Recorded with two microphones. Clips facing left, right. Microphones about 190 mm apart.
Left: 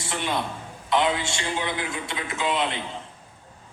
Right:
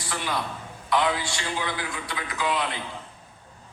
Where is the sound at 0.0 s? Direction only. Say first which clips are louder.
Left 2 dB; 25° left (ahead or behind).